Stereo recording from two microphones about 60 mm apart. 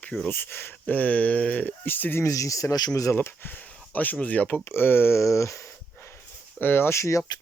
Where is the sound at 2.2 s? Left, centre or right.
Left.